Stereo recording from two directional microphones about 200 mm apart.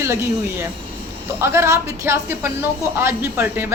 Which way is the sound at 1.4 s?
15° right (ahead or behind).